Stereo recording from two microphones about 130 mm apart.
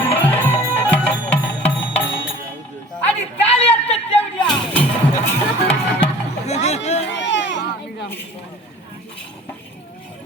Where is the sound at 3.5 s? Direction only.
50° left (ahead or behind).